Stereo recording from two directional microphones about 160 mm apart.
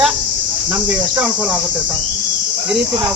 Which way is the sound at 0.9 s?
10° right (ahead or behind).